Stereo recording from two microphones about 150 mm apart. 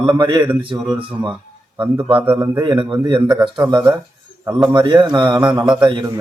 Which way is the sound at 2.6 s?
30° right (ahead or behind).